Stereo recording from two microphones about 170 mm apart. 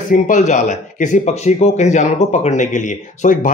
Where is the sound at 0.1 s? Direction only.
45° left (ahead or behind).